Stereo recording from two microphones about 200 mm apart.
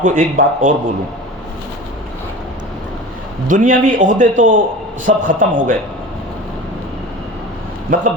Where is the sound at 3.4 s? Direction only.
40° right (ahead or behind).